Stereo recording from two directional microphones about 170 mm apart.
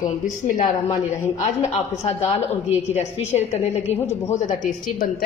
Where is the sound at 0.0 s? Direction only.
50° left (ahead or behind).